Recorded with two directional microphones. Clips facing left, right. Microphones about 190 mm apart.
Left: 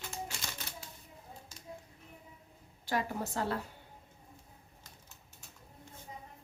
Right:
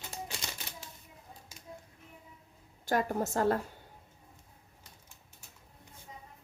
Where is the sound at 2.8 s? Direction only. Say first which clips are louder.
Right 4 dB; 45° right (ahead or behind).